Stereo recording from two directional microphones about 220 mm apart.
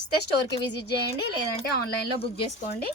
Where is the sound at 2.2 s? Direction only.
30° left (ahead or behind).